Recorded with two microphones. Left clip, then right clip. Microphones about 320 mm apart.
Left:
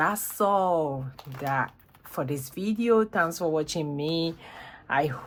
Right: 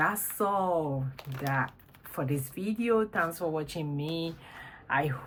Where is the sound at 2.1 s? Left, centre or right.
Centre.